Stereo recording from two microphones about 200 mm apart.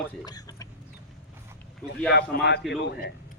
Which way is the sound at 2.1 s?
55° left (ahead or behind).